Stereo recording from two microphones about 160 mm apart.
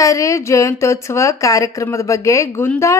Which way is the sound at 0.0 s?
20° left (ahead or behind).